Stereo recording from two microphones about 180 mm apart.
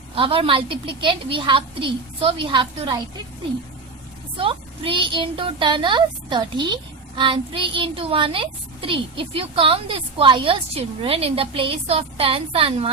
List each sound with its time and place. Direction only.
0.2 s a woman's voice: 30° right (ahead or behind)
4.4 s a woman's voice: 30° right (ahead or behind)